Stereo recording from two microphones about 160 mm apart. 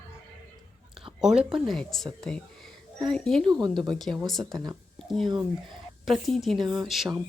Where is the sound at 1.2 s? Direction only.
5° right (ahead or behind).